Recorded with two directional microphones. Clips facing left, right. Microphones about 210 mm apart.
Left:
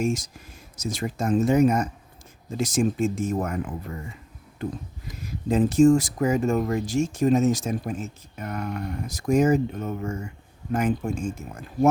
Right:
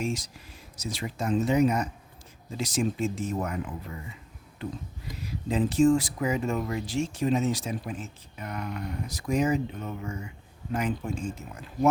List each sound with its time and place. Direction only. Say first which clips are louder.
0.0 s speech: left 6 dB; 45° left (ahead or behind)